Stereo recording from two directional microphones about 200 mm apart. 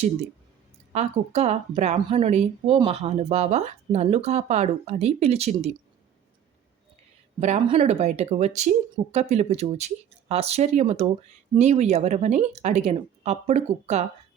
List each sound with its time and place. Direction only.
0.9 s a woman's voice: 35° right (ahead or behind)
7.3 s a woman's voice: 30° right (ahead or behind)